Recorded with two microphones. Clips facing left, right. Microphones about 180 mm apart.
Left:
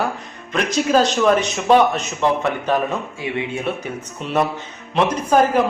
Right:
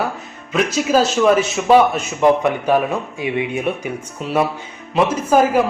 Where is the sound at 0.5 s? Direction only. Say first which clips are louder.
Right 1 dB; 5° right (ahead or behind).